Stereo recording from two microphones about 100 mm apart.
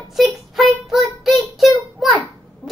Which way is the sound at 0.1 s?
Centre (ahead or behind).